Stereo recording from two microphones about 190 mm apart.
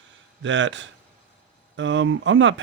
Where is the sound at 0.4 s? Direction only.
75° right (ahead or behind).